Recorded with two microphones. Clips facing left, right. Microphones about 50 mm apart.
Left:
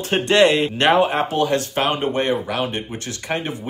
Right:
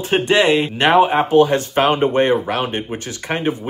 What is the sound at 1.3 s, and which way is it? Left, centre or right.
Speech, right.